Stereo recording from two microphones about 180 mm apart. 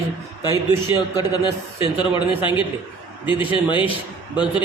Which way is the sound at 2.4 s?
25° left (ahead or behind).